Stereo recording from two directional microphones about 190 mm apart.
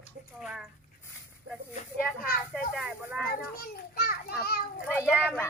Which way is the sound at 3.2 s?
55° left (ahead or behind).